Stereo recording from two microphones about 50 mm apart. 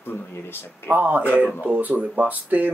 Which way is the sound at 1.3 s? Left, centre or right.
Left.